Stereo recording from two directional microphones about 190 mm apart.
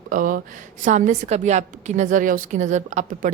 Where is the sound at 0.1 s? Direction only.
45° right (ahead or behind).